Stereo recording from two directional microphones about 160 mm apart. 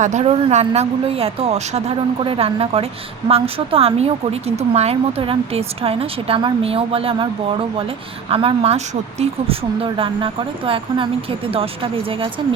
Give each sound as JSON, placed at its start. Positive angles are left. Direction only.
{"t": 0.0, "sound": "speech", "side_deg": -45}
{"t": 8.3, "sound": "speech", "side_deg": -35}